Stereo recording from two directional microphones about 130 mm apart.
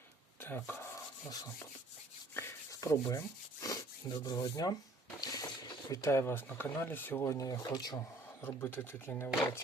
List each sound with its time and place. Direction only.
0.4 s speech: 15° left (ahead or behind)
2.3 s rub: 20° left (ahead or behind)
3.6 s speech: 25° left (ahead or behind)
8.4 s speech: 15° left (ahead or behind)